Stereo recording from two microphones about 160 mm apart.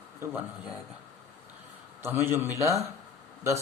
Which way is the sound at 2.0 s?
15° right (ahead or behind).